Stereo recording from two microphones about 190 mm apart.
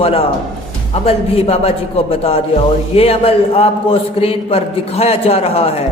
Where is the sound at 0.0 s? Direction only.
30° left (ahead or behind).